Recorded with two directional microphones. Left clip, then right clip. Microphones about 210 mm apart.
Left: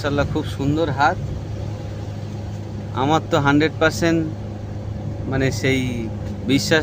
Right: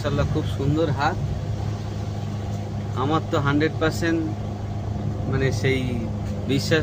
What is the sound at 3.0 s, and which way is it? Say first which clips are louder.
Speech: left 5 dB; 50° left (ahead or behind).